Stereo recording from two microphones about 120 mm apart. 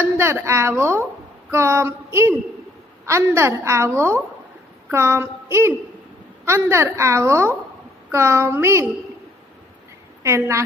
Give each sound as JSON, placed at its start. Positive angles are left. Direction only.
{"t": 0.0, "sound": "a woman's voice", "side_deg": -20}
{"t": 10.2, "sound": "a woman's voice", "side_deg": -25}